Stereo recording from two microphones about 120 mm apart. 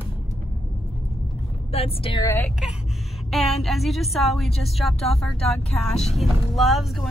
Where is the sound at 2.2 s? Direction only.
20° left (ahead or behind).